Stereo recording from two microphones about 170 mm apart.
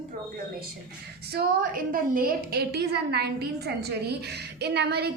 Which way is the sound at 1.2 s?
65° right (ahead or behind).